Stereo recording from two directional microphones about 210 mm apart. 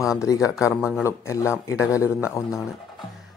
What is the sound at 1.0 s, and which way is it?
Speech, 15° left (ahead or behind).